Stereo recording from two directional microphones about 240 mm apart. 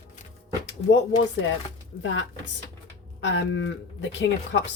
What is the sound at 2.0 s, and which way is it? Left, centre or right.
Speech, left.